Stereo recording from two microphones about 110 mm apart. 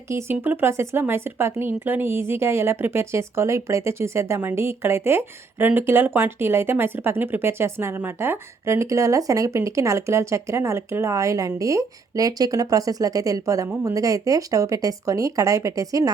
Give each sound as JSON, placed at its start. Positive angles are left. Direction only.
{"t": 0.1, "sound": "speech", "side_deg": -25}